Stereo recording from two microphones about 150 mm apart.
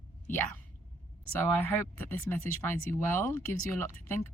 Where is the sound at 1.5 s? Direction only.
15° left (ahead or behind).